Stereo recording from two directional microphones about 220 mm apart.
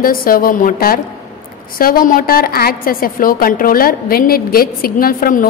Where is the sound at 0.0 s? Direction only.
40° left (ahead or behind).